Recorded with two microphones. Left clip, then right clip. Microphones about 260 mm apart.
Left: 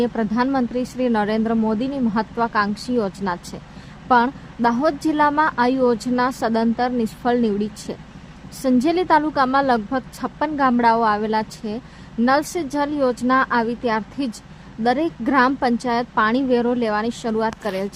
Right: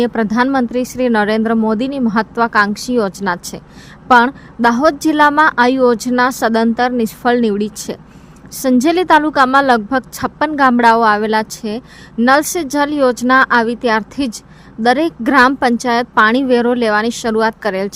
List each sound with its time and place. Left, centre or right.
0.0 s a woman's voice: right